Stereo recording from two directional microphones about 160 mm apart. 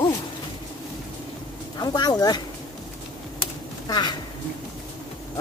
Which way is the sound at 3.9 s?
25° left (ahead or behind).